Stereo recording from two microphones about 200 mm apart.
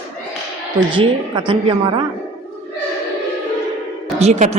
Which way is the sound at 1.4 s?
25° right (ahead or behind).